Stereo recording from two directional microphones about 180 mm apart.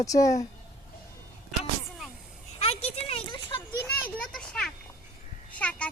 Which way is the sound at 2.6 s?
35° left (ahead or behind).